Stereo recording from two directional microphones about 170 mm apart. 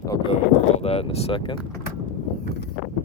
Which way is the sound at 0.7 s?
35° left (ahead or behind).